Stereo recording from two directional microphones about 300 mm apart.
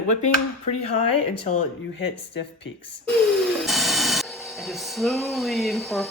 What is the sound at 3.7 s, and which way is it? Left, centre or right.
Speech, centre.